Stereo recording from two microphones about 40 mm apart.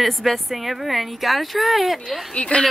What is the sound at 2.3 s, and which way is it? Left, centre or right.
Speech, left.